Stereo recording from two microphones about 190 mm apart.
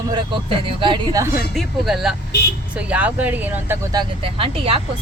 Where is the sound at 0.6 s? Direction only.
25° right (ahead or behind).